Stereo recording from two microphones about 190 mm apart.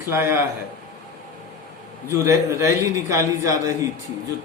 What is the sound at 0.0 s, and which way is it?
Speech, 10° right (ahead or behind).